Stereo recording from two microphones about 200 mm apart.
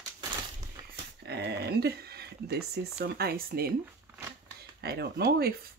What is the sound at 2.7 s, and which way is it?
Speech, 55° right (ahead or behind).